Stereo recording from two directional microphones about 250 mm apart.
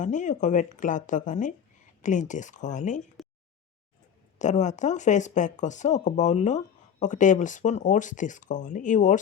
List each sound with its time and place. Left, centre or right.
0.0 s speech: left
3.2 s a sound: centre
4.4 s speech: left